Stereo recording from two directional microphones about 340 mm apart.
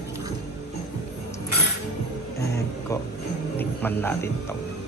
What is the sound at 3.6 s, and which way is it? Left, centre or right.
Speech, centre.